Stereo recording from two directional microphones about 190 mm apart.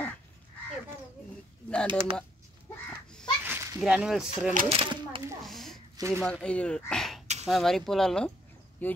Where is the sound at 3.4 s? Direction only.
15° right (ahead or behind).